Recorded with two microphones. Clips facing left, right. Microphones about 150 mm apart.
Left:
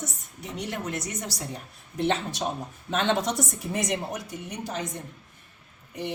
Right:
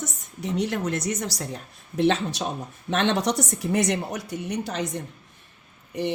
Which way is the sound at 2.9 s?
75° right (ahead or behind).